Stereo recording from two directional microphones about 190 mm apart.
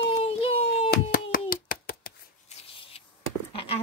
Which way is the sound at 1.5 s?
50° left (ahead or behind).